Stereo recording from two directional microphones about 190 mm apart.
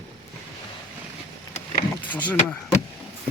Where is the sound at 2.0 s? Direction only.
10° left (ahead or behind).